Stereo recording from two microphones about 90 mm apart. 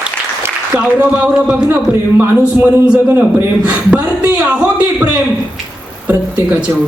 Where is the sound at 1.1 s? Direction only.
15° right (ahead or behind).